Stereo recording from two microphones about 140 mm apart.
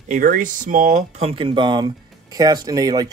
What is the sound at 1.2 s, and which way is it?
Speech, 45° right (ahead or behind).